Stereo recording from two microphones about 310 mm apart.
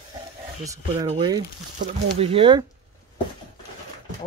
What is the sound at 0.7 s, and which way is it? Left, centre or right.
Speech, centre.